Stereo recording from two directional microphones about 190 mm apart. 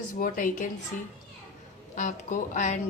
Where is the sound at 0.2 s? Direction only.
45° left (ahead or behind).